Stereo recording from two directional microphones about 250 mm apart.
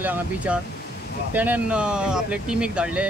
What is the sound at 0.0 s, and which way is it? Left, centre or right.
Speech, centre.